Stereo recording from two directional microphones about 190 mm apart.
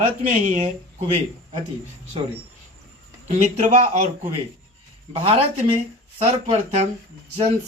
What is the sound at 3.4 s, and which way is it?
Speech, 40° right (ahead or behind).